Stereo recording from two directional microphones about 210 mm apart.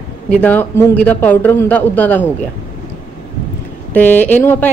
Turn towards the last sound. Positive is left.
turn(degrees=10)  # may be behind; listen again after turning